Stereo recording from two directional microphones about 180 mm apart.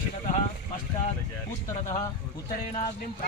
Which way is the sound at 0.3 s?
45° left (ahead or behind).